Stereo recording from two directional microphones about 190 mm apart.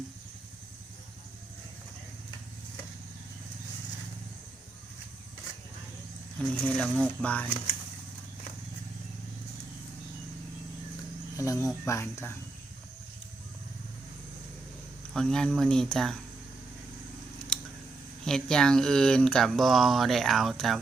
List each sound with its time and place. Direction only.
6.4 s speech: 5° left (ahead or behind)
11.3 s speech: 15° left (ahead or behind)
15.1 s speech: 5° left (ahead or behind)
17.5 s scissors: 5° left (ahead or behind)
18.3 s speech: 5° left (ahead or behind)